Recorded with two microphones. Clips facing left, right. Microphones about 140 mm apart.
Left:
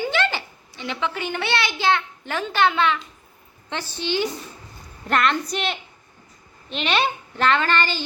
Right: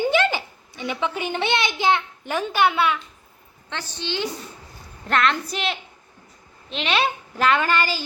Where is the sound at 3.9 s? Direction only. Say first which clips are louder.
Left 3 dB; 10° left (ahead or behind).